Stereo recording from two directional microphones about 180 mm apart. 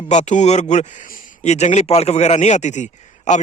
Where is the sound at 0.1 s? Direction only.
40° left (ahead or behind).